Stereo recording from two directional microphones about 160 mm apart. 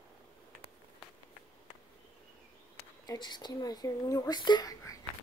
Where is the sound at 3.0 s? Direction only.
25° left (ahead or behind).